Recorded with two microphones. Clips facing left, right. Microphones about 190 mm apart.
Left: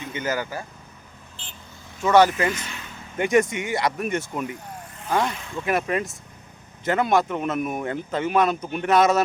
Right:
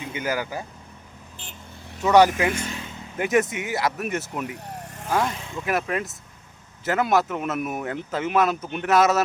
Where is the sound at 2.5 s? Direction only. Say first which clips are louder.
Right 6 dB; 45° right (ahead or behind).